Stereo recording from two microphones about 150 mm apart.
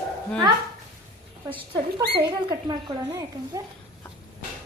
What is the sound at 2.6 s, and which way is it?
Speech, 25° right (ahead or behind).